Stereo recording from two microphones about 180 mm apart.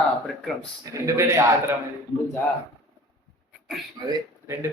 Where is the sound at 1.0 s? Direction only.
15° right (ahead or behind).